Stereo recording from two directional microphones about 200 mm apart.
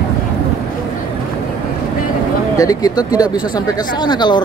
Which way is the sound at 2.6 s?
20° left (ahead or behind).